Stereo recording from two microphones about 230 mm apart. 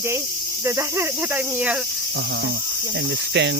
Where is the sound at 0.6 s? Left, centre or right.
Centre.